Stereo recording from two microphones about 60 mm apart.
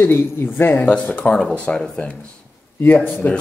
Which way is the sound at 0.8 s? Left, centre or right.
Centre.